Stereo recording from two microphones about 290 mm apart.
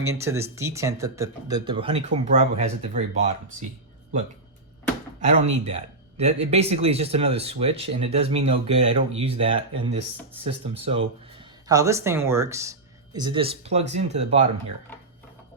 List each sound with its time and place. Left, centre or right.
0.0 s speech: centre
5.5 s speech: right